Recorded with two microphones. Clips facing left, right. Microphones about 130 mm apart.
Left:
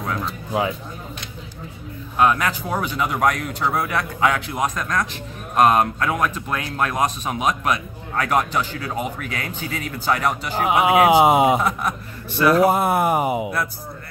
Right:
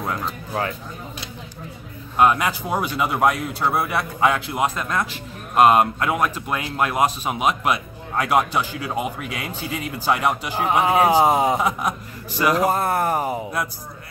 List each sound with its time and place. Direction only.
0.5 s speech: 10° left (ahead or behind)
2.1 s a man's voice: 10° right (ahead or behind)
10.6 s speech: 10° left (ahead or behind)
12.4 s a man's voice: 10° right (ahead or behind)
12.6 s speech: 15° left (ahead or behind)